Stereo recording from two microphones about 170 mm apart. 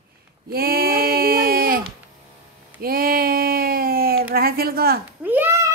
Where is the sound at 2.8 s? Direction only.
60° right (ahead or behind).